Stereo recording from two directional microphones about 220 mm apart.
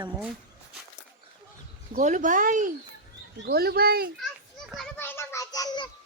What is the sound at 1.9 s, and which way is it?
Speech, 35° right (ahead or behind).